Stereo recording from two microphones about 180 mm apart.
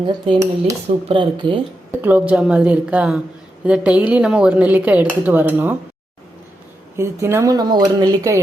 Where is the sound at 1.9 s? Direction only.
10° right (ahead or behind).